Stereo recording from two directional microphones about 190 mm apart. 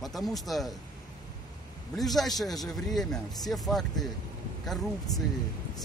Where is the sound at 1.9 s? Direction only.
Centre (ahead or behind).